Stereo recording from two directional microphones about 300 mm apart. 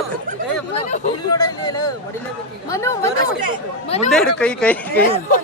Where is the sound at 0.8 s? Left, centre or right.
Left.